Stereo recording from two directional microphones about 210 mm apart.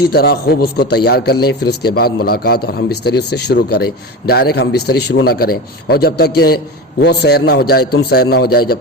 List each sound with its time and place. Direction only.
0.1 s a man's voice: 50° left (ahead or behind)